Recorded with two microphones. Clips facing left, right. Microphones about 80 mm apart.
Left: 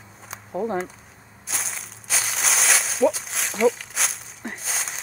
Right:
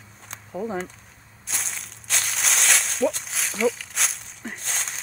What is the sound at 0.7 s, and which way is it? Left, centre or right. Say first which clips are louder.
Speech: left 2 dB; centre.